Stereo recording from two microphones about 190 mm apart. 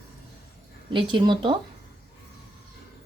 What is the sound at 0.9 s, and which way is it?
Speech, 25° right (ahead or behind).